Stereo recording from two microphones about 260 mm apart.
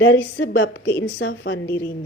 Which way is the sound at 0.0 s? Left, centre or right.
Left.